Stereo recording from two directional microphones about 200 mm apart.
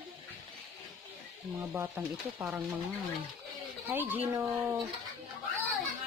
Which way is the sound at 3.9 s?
10° right (ahead or behind).